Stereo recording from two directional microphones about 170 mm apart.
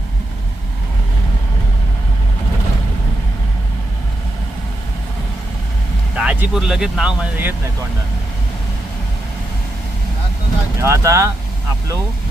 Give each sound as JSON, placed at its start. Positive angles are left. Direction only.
{"t": 6.1, "sound": "speech", "side_deg": -5}
{"t": 10.8, "sound": "speech", "side_deg": -15}